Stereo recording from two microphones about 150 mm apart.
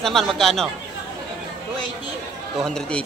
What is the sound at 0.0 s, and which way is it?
Speech, centre (ahead or behind).